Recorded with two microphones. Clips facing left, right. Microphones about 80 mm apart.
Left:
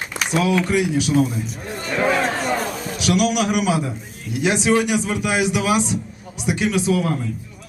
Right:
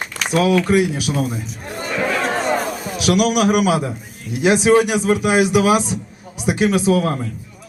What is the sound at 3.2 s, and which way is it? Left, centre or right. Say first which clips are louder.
Speech: right 4 dB; right.